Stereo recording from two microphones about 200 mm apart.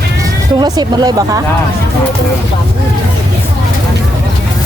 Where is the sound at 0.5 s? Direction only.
20° right (ahead or behind).